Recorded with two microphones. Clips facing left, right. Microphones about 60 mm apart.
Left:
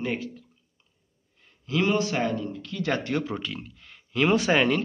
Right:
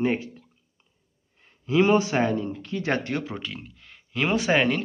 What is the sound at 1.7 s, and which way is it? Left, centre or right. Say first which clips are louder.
Speech: right 4 dB; right.